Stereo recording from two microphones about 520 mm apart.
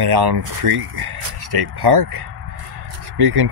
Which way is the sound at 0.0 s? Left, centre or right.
Right.